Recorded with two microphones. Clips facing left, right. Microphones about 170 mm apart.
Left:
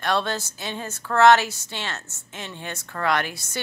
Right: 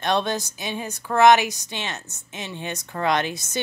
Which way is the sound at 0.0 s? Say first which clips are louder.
Right 2 dB; 20° right (ahead or behind).